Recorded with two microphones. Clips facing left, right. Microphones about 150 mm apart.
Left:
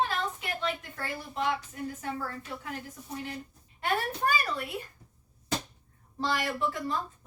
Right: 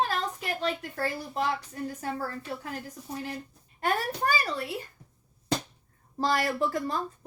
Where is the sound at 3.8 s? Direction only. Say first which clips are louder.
Right 2 dB; 40° right (ahead or behind).